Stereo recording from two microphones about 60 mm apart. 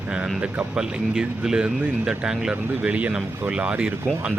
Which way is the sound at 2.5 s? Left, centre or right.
Right.